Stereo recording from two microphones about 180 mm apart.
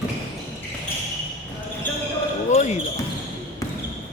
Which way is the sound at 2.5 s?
40° left (ahead or behind).